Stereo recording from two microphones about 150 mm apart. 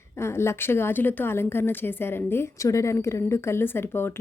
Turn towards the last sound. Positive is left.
turn(degrees=15)  # may be behind; listen again after turning